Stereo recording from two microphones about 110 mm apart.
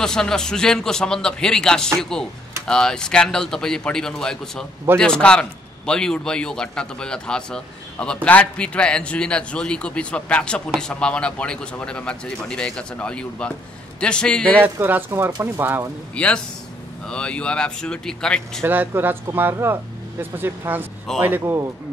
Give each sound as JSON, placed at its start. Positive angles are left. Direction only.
{"t": 0.0, "sound": "a man's voice", "side_deg": 5}
{"t": 14.6, "sound": "speech", "side_deg": -15}
{"t": 16.2, "sound": "a man's voice", "side_deg": 10}
{"t": 18.6, "sound": "speech", "side_deg": -20}